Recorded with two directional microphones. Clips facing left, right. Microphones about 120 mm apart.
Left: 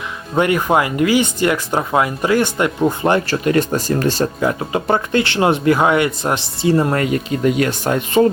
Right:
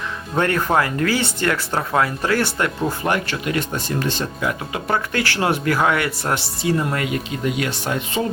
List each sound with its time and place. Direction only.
0.3 s speech: 15° left (ahead or behind)
3.2 s speech: 40° left (ahead or behind)